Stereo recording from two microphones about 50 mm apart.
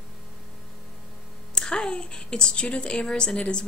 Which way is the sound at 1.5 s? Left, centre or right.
Centre.